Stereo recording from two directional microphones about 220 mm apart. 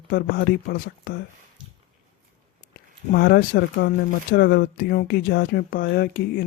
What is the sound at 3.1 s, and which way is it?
Speech, 45° left (ahead or behind).